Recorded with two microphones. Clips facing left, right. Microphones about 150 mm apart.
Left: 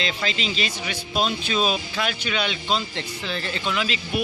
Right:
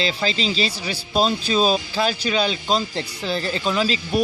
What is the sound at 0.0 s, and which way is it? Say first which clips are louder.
Speech: right 4 dB; 35° right (ahead or behind).